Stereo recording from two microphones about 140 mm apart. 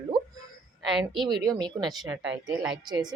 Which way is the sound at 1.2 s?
30° right (ahead or behind).